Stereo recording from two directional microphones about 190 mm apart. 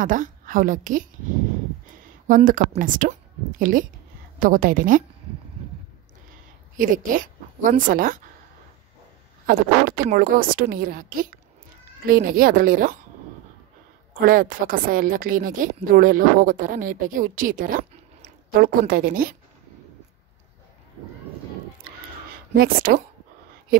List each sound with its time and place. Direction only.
0.0 s a woman's voice: 45° right (ahead or behind)
2.2 s a woman's voice: 45° right (ahead or behind)
6.8 s a woman's voice: 45° right (ahead or behind)
9.5 s a woman's voice: 45° right (ahead or behind)
14.1 s a woman's voice: 50° right (ahead or behind)
22.6 s a woman's voice: 50° right (ahead or behind)